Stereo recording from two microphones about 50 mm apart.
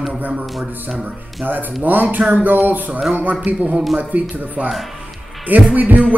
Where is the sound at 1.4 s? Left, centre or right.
Right.